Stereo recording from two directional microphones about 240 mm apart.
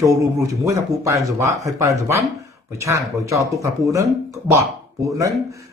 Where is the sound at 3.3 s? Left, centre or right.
Centre.